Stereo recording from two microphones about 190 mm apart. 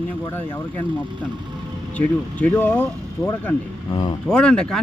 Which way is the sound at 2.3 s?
10° left (ahead or behind).